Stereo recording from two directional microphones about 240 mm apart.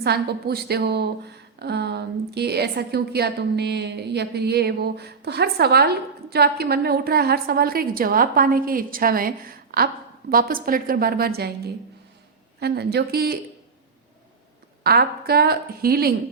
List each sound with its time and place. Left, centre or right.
0.0 s a woman's voice: right
14.8 s a woman's voice: right